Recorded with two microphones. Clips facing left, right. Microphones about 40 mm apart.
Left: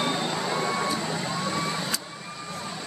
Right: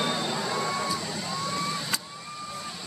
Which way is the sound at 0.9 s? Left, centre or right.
Left.